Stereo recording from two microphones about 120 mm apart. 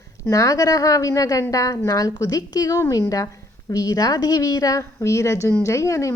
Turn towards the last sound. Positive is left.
turn(degrees=25)  # may be behind; listen again after turning